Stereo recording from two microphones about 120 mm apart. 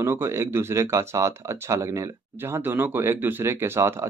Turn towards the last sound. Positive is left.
turn(degrees=-20)  # may be behind; listen again after turning